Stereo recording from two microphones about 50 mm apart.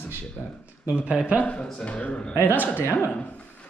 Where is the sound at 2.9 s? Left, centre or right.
Left.